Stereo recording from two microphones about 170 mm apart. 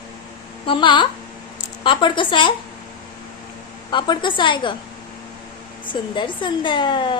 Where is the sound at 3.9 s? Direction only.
25° left (ahead or behind).